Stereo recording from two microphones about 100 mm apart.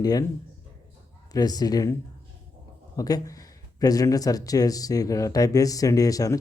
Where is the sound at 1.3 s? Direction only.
40° left (ahead or behind).